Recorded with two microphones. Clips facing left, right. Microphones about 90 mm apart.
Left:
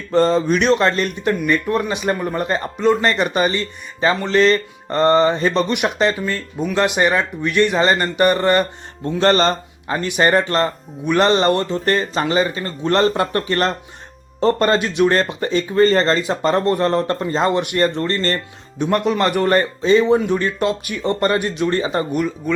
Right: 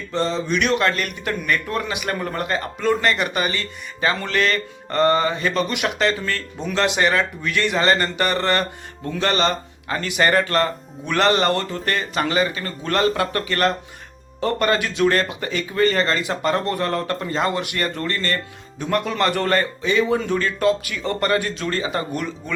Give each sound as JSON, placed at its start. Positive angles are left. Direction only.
{"t": 0.1, "sound": "speech", "side_deg": 50}
{"t": 9.0, "sound": "speech", "side_deg": 35}
{"t": 9.9, "sound": "speech", "side_deg": 20}
{"t": 18.8, "sound": "speech", "side_deg": 20}
{"t": 19.8, "sound": "speech", "side_deg": 30}
{"t": 20.1, "sound": "speech", "side_deg": 15}